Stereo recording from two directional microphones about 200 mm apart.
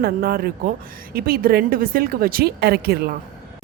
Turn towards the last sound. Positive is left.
turn(degrees=-55)  # may be behind; listen again after turning